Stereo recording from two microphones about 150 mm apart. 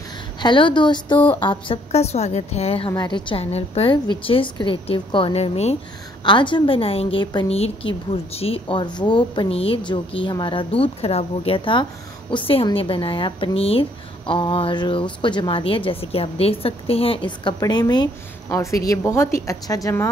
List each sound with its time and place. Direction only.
0.4 s a woman's voice: 30° left (ahead or behind)
2.9 s speech: 30° left (ahead or behind)
6.2 s a woman's voice: 30° left (ahead or behind)